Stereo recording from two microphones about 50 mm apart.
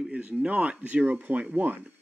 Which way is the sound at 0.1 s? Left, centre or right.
Right.